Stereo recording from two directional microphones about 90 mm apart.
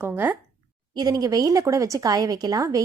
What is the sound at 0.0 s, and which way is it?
Speech, 25° right (ahead or behind).